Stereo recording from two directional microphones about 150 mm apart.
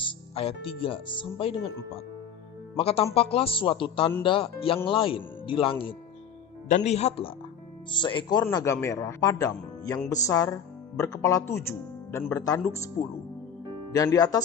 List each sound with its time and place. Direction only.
0.0 s speech: 40° left (ahead or behind)
2.7 s speech: 40° left (ahead or behind)
6.7 s speech: 50° left (ahead or behind)
7.9 s a man's voice: 30° left (ahead or behind)